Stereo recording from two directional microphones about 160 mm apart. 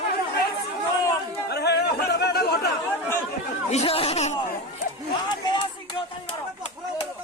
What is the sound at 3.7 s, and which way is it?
Speech, 40° left (ahead or behind).